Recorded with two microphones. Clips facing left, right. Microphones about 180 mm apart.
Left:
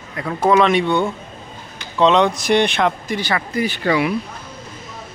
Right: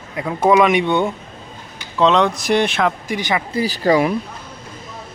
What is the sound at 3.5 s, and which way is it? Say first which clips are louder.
Speech: right 3 dB; 35° right (ahead or behind).